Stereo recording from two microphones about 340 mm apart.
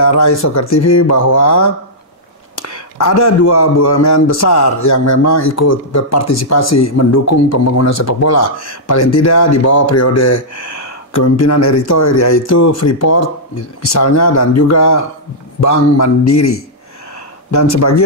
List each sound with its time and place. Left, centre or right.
0.1 s speech: left
2.6 s speech: left
17.5 s speech: left